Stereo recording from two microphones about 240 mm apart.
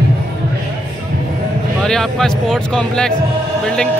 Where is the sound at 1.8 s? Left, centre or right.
Centre.